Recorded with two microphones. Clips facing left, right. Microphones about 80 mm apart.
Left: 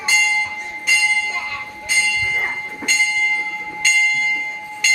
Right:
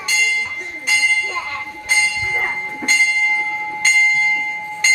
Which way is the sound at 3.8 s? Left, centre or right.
Right.